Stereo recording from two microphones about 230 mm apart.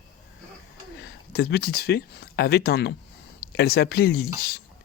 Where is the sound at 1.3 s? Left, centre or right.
Left.